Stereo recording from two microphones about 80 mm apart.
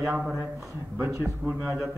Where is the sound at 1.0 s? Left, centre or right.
Right.